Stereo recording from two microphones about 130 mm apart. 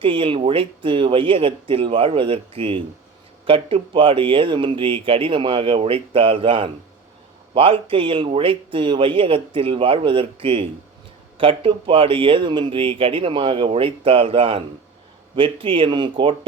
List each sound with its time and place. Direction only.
0.0 s speech: 45° right (ahead or behind)